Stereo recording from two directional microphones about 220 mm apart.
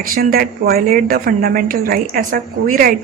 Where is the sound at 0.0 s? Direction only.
40° right (ahead or behind).